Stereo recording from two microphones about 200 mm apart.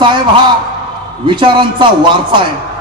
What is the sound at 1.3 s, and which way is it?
Speech, 25° right (ahead or behind).